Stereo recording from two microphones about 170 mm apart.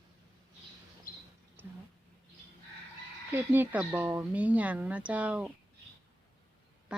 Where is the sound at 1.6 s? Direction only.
10° right (ahead or behind).